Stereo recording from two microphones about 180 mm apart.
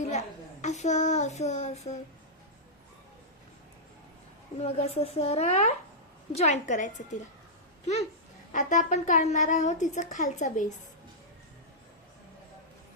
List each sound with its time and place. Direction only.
0.6 s speech: 40° left (ahead or behind)
4.5 s a woman's voice: 35° left (ahead or behind)
8.5 s speech: 45° left (ahead or behind)